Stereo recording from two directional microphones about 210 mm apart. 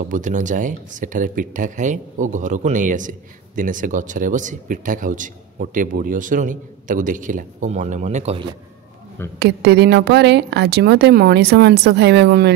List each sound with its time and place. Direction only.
0.1 s speech: 35° right (ahead or behind)
9.4 s speech: 50° right (ahead or behind)